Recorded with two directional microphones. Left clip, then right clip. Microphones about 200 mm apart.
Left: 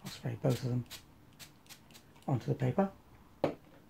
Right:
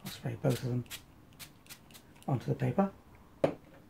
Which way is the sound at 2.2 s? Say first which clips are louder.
Right 1 dB; 35° left (ahead or behind).